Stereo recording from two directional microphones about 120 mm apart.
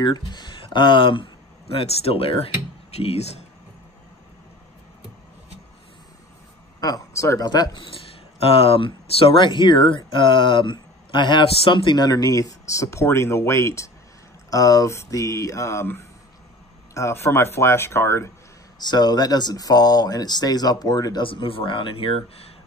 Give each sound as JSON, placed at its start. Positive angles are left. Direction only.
{"t": 0.0, "sound": "speech", "side_deg": 40}
{"t": 6.8, "sound": "speech", "side_deg": 30}
{"t": 8.4, "sound": "speech", "side_deg": 50}
{"t": 18.8, "sound": "speech", "side_deg": 35}
{"t": 21.2, "sound": "speech", "side_deg": 45}